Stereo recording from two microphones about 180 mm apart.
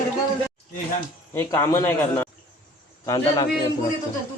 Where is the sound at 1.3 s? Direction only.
15° left (ahead or behind).